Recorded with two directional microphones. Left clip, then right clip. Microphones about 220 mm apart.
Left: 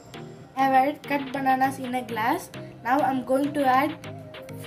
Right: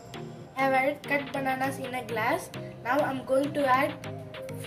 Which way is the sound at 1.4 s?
25° left (ahead or behind).